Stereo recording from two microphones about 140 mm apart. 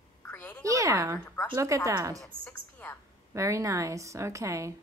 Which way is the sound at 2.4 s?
15° left (ahead or behind).